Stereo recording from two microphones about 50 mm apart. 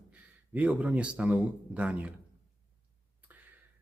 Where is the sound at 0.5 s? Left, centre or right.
Right.